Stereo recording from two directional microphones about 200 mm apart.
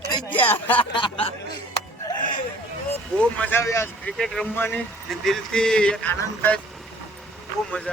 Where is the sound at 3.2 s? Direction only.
10° left (ahead or behind).